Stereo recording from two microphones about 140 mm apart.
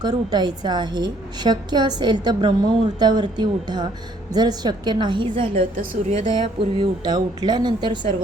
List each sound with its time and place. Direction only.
0.0 s a woman's voice: 30° right (ahead or behind)